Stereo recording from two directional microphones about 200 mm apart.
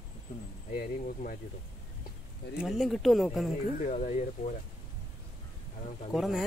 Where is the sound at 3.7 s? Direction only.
35° left (ahead or behind).